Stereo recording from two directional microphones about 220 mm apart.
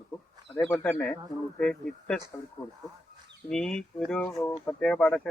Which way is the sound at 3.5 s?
5° left (ahead or behind).